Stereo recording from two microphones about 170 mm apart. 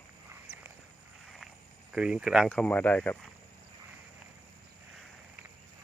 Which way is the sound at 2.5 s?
5° left (ahead or behind).